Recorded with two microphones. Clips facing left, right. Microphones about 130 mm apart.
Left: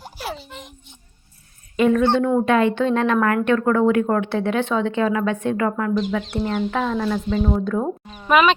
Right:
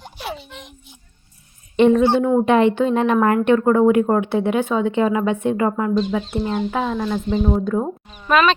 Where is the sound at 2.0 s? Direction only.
10° right (ahead or behind).